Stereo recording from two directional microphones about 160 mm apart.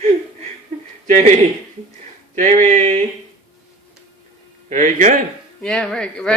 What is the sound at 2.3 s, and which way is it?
Speech, 50° right (ahead or behind).